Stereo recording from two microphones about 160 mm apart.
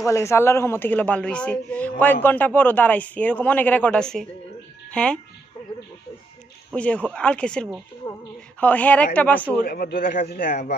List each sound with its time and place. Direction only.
0.0 s a woman's voice: 20° left (ahead or behind)
6.7 s a woman's voice: 5° left (ahead or behind)
9.6 s a man's voice: 75° left (ahead or behind)